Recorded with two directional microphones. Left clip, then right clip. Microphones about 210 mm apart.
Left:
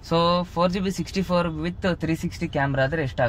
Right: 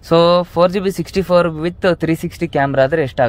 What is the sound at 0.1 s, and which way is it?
Speech, 45° right (ahead or behind).